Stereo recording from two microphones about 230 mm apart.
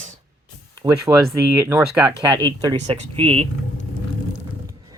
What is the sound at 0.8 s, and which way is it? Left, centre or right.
Speech, centre.